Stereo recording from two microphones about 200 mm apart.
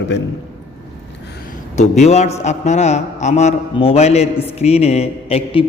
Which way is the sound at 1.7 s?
35° left (ahead or behind).